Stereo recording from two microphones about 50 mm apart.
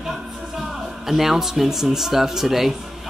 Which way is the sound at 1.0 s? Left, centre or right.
Centre.